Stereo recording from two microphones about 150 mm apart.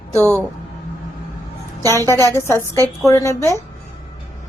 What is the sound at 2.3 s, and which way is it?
A woman's voice, 15° left (ahead or behind).